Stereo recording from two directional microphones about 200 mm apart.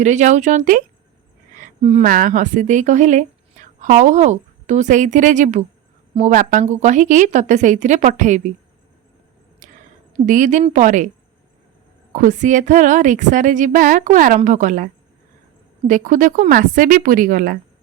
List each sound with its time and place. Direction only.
0.0 s a woman's voice: 35° right (ahead or behind)
1.5 s a sound: 35° right (ahead or behind)
2.0 s a woman's voice: 45° right (ahead or behind)
9.6 s a sound: 40° right (ahead or behind)
10.2 s a woman's voice: 40° right (ahead or behind)
12.1 s a woman's voice: 40° right (ahead or behind)
15.9 s speech: 40° right (ahead or behind)